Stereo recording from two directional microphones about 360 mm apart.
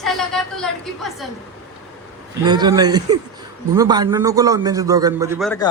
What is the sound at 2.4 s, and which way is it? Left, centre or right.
A man's voice, centre.